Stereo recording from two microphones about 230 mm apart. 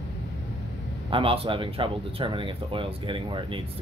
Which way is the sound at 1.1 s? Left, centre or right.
Right.